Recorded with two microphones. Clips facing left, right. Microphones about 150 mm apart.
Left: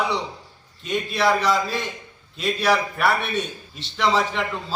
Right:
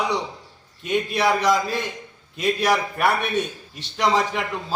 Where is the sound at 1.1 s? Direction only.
15° right (ahead or behind).